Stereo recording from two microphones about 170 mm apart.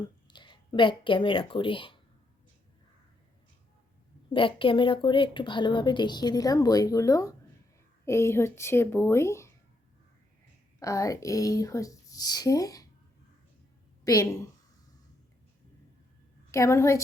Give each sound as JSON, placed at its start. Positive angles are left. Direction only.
{"t": 0.3, "sound": "speech", "side_deg": 25}
{"t": 4.3, "sound": "a woman's voice", "side_deg": 30}
{"t": 10.8, "sound": "a woman's voice", "side_deg": 20}
{"t": 14.0, "sound": "a woman's voice", "side_deg": 20}
{"t": 16.5, "sound": "speech", "side_deg": 15}